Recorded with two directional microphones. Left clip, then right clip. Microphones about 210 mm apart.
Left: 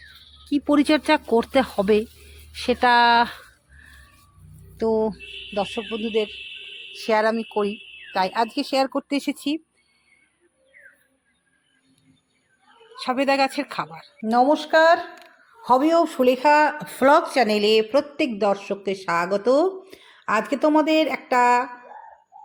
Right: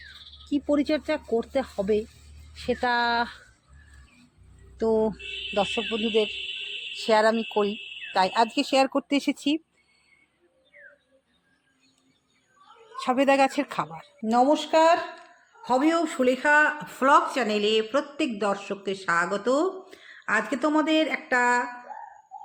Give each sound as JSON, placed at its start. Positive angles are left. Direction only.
{"t": 0.5, "sound": "speech", "side_deg": 35}
{"t": 4.8, "sound": "speech", "side_deg": 15}
{"t": 13.0, "sound": "speech", "side_deg": 0}
{"t": 14.3, "sound": "speech", "side_deg": 10}